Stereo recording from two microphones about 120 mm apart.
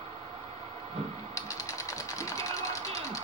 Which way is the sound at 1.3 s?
25° left (ahead or behind).